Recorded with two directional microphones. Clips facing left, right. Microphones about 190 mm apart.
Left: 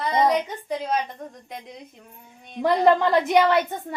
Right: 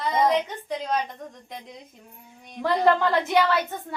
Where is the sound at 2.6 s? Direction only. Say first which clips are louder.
Left 3 dB; 20° left (ahead or behind).